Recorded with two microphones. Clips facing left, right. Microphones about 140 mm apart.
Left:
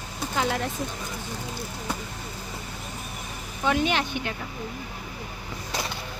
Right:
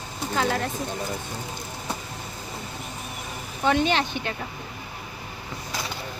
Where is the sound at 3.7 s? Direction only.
5° left (ahead or behind).